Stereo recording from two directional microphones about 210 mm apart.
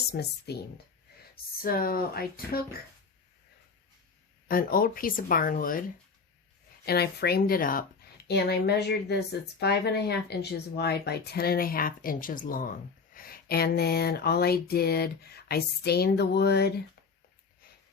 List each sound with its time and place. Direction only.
0.1 s speech: 50° left (ahead or behind)
1.6 s speech: 45° left (ahead or behind)
4.4 s speech: 45° left (ahead or behind)
6.8 s speech: 50° left (ahead or behind)